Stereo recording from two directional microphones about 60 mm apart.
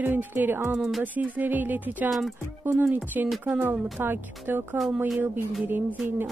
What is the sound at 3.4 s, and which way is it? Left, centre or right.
Speech, right.